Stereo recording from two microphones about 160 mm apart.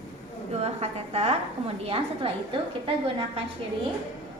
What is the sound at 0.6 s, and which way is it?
A woman's voice, 40° right (ahead or behind).